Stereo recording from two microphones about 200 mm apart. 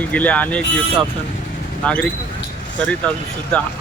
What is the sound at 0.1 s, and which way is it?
Speech, 5° left (ahead or behind).